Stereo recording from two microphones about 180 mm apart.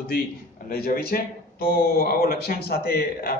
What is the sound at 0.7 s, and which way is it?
Speech, 55° left (ahead or behind).